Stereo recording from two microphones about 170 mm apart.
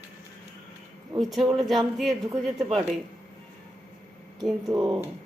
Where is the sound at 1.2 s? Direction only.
Centre (ahead or behind).